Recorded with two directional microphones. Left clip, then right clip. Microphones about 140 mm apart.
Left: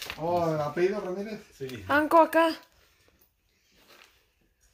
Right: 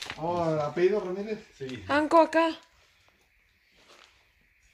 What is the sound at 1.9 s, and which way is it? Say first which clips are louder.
Speech: left 1 dB; 15° right (ahead or behind).